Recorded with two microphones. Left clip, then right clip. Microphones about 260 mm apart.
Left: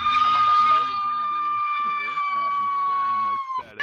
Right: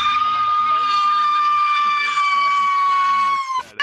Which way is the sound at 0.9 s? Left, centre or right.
Right.